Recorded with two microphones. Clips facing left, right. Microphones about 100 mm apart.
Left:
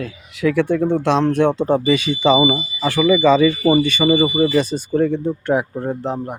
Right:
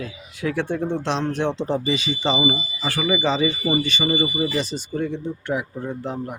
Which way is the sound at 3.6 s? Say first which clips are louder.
Left 7 dB; 75° left (ahead or behind).